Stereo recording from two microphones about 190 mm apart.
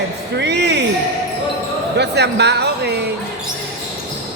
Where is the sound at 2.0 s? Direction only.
60° right (ahead or behind).